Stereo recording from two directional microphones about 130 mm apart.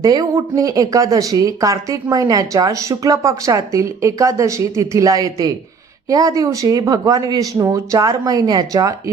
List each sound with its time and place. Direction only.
0.0 s speech: 25° right (ahead or behind)